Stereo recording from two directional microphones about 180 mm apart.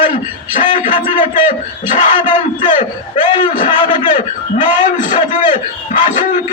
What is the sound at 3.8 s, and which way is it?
A man's voice, 45° left (ahead or behind).